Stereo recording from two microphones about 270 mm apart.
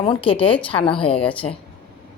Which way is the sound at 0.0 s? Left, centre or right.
Centre.